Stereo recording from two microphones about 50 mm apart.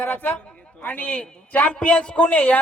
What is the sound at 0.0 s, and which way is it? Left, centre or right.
Speech, left.